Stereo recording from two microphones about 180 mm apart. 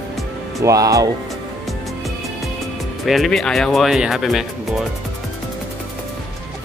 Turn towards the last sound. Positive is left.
turn(degrees=0)  # may be behind; listen again after turning